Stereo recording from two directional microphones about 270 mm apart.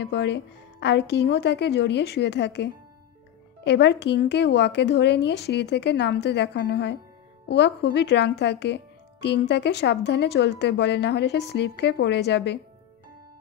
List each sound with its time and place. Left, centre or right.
0.0 s speech: left